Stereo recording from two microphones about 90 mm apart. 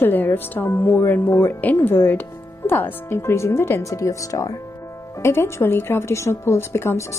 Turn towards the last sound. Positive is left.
turn(degrees=30)  # may be behind; listen again after turning